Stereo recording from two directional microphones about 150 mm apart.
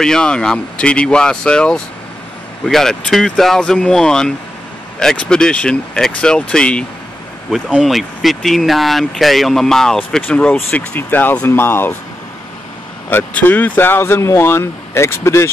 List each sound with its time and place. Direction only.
0.0 s speech: 5° left (ahead or behind)
13.1 s speech: 10° left (ahead or behind)